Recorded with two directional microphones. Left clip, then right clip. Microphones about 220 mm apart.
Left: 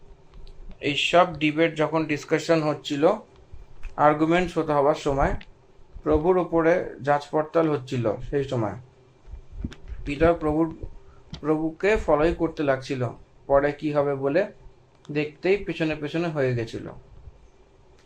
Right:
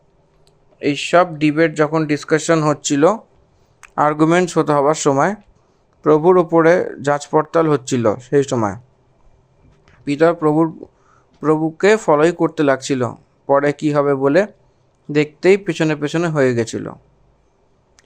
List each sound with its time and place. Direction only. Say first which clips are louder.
0.9 s speech: right 5 dB; 45° right (ahead or behind)
10.1 s speech: right 7 dB; 55° right (ahead or behind)